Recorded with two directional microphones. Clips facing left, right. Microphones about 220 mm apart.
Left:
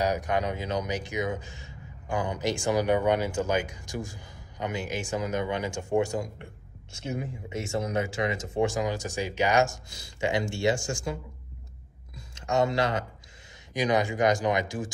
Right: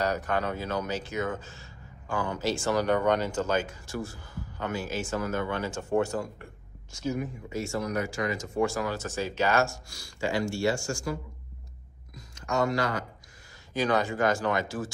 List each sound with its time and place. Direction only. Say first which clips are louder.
0.0 s speech: left 1 dB; 15° left (ahead or behind)
6.9 s speech: right 3 dB; 25° left (ahead or behind)
12.4 s speech: left 2 dB; 25° left (ahead or behind)